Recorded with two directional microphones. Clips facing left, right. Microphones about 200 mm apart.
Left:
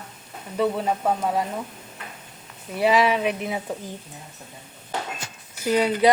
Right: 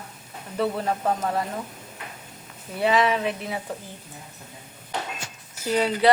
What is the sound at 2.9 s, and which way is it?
Speech, 5° left (ahead or behind).